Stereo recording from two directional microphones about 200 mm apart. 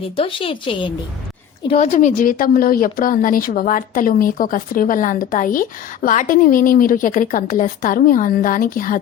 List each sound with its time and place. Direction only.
0.0 s a woman's voice: 30° left (ahead or behind); by 9.0 s 45° left (ahead or behind)